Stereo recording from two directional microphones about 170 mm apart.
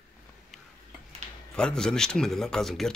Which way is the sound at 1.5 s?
5° left (ahead or behind).